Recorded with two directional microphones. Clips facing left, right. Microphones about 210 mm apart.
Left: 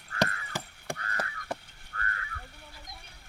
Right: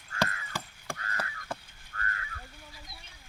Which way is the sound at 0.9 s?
35° left (ahead or behind).